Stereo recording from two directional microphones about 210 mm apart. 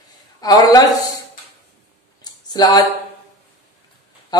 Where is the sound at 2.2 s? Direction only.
20° left (ahead or behind).